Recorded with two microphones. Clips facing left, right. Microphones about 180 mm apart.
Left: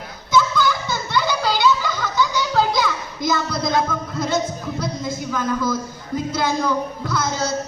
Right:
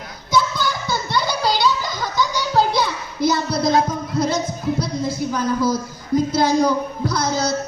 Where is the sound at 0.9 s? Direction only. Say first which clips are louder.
Even; 35° right (ahead or behind).